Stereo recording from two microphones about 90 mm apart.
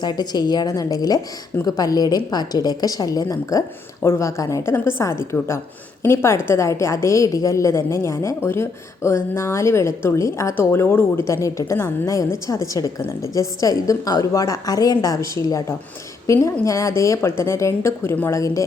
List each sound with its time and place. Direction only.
0.0 s a woman's voice: 50° left (ahead or behind); by 18.3 s 25° left (ahead or behind)
18.3 s a woman's voice: 35° left (ahead or behind)